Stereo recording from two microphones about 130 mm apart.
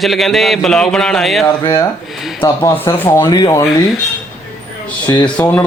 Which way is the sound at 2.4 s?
20° left (ahead or behind).